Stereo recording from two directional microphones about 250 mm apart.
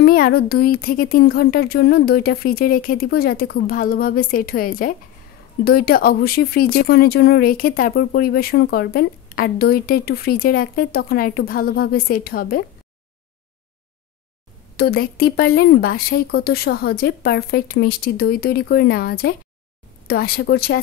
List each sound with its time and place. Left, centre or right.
0.0 s speech: left
14.8 s speech: left